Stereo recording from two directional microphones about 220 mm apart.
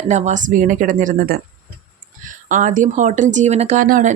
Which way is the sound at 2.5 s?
35° right (ahead or behind).